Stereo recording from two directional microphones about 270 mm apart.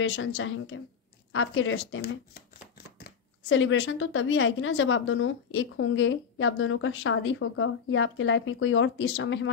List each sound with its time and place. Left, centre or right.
0.0 s speech: left